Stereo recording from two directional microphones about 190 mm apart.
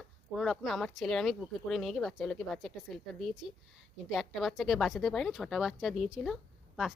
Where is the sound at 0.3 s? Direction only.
Centre (ahead or behind).